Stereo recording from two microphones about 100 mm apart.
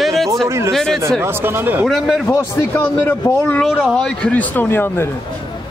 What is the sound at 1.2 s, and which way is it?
Speech, 20° right (ahead or behind).